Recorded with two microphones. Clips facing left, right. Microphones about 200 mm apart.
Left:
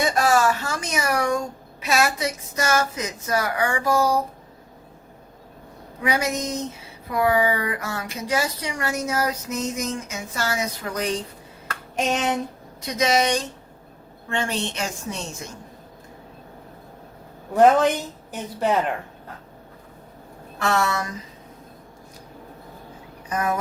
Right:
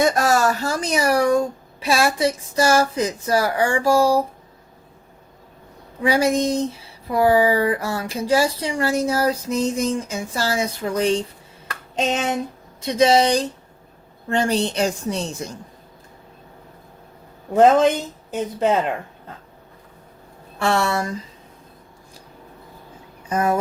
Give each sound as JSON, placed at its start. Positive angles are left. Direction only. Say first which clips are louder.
{"t": 0.0, "sound": "speech", "louder": "right 2 dB", "side_deg": -40}
{"t": 6.0, "sound": "speech", "louder": "right 6 dB", "side_deg": -30}
{"t": 17.5, "sound": "speech", "louder": "right 2 dB", "side_deg": -20}
{"t": 20.6, "sound": "speech", "louder": "right 3 dB", "side_deg": -30}
{"t": 23.3, "sound": "speech", "louder": "right 4 dB", "side_deg": -30}